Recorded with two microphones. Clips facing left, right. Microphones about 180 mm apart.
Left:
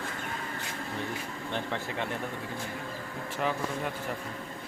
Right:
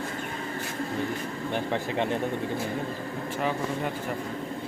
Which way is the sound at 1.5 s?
20° right (ahead or behind).